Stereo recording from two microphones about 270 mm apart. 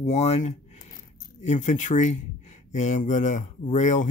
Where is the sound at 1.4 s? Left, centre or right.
Left.